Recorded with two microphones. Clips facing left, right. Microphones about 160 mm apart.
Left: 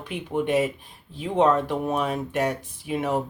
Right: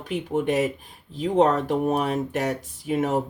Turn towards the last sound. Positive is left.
turn(degrees=-45)  # may be behind; listen again after turning